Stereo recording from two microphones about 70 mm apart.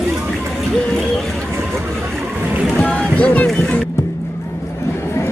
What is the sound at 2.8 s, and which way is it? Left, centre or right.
Speech, centre.